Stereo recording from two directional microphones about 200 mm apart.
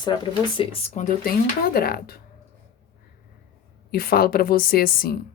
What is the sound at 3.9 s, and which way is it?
A woman's voice, 50° left (ahead or behind).